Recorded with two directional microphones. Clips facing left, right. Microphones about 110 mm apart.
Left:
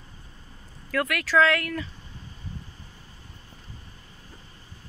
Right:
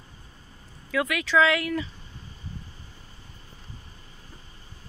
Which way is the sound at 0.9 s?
Centre (ahead or behind).